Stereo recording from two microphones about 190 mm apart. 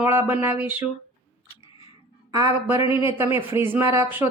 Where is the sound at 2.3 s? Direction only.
20° right (ahead or behind).